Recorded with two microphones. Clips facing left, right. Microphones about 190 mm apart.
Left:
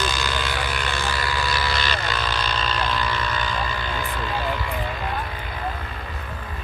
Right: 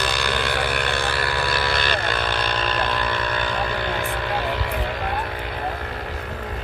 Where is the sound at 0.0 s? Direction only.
60° right (ahead or behind).